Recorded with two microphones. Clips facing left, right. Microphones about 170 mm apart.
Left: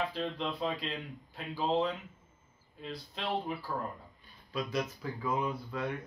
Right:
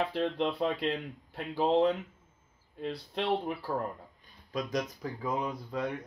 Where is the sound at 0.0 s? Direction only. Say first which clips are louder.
Right 5 dB; 60° right (ahead or behind).